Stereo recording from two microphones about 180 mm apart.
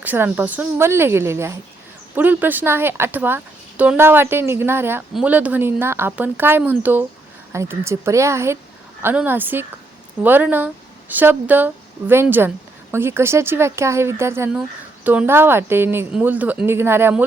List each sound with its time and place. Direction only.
0.0 s a woman's voice: 10° right (ahead or behind)